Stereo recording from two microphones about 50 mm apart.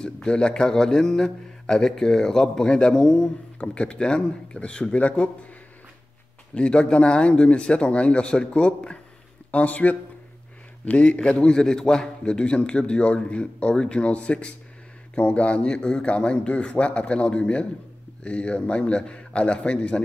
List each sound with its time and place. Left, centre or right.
0.0 s a man's voice: centre
3.5 s a man's voice: left
6.5 s a man's voice: left